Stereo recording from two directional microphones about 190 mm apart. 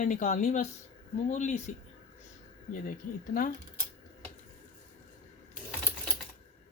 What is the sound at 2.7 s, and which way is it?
Speech, 45° left (ahead or behind).